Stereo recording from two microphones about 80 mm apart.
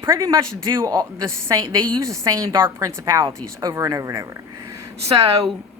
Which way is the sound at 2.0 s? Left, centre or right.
Right.